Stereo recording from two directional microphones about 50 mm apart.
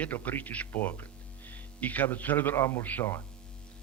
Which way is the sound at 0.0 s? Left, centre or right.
Left.